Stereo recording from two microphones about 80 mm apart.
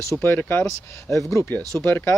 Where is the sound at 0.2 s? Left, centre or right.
Left.